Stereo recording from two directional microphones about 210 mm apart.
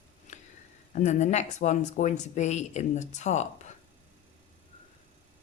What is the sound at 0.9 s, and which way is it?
Speech, 35° left (ahead or behind).